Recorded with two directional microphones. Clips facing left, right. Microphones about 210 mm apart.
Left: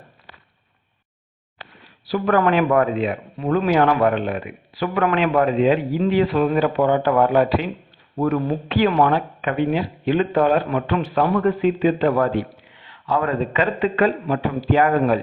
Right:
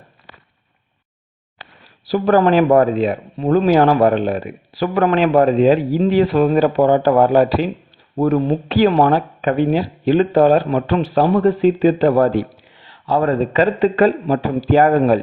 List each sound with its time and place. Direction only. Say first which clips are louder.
2.0 s speech: right 4 dB; 35° right (ahead or behind)